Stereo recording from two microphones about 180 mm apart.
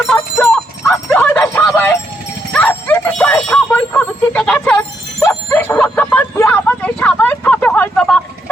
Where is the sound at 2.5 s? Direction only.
10° left (ahead or behind).